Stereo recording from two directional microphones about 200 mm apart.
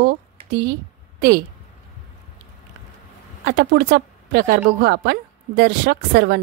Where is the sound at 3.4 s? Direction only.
50° right (ahead or behind).